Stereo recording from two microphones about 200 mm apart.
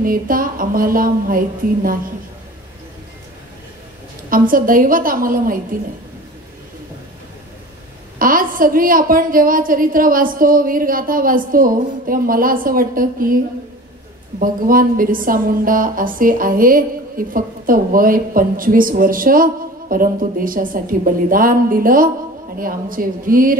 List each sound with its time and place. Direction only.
0.0 s a woman's voice: 45° right (ahead or behind)
4.3 s a woman's voice: 45° right (ahead or behind)
8.2 s a woman's voice: 45° right (ahead or behind)
14.4 s a woman's voice: 45° right (ahead or behind)